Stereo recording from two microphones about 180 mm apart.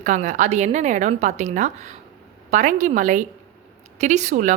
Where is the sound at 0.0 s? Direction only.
45° right (ahead or behind).